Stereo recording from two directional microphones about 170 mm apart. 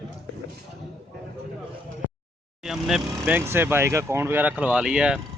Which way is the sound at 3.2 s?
10° right (ahead or behind).